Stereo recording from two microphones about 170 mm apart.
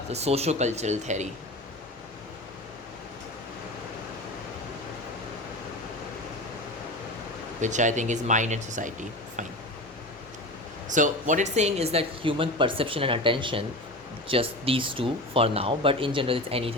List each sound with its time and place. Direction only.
0.1 s speech: 40° right (ahead or behind)
7.6 s speech: 45° right (ahead or behind)
10.9 s speech: 50° right (ahead or behind)